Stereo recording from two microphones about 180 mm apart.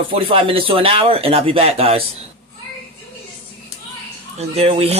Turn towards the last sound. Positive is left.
turn(degrees=-30)  # may be behind; listen again after turning